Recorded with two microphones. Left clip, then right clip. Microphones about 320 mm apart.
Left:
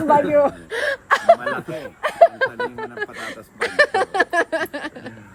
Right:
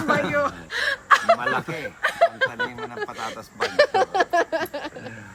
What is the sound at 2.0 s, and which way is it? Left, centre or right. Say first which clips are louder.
Speech: left 5 dB; centre.